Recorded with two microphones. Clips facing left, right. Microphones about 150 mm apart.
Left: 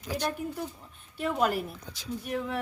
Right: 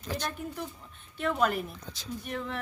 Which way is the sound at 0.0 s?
10° left (ahead or behind).